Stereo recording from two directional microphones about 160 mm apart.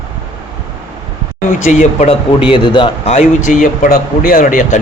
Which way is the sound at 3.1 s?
50° left (ahead or behind).